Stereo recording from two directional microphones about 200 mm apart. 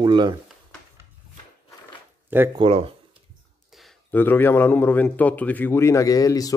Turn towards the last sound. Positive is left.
turn(degrees=15)  # may be behind; listen again after turning